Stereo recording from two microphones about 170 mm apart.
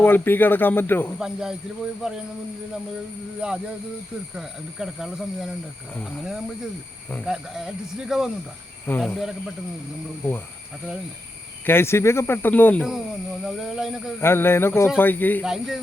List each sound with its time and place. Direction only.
0.0 s speech: 10° left (ahead or behind)
1.2 s speech: 5° right (ahead or behind)
3.4 s speech: 5° right (ahead or behind)
8.9 s speech: 10° left (ahead or behind)
11.6 s speech: 15° left (ahead or behind)
13.4 s speech: centre (ahead or behind)
14.2 s speech: 15° left (ahead or behind)
15.4 s speech: centre (ahead or behind)